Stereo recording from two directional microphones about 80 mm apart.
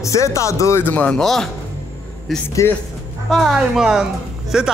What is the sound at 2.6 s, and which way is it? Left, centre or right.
Speech, left.